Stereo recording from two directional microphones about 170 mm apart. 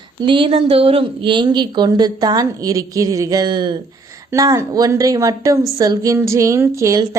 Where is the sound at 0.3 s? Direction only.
30° right (ahead or behind).